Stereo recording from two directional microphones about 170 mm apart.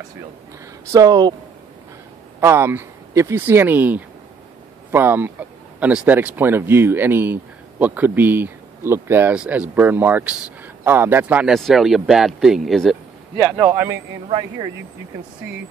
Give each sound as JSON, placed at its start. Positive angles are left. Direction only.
{"t": 0.9, "sound": "speech", "side_deg": -20}
{"t": 2.4, "sound": "speech", "side_deg": -15}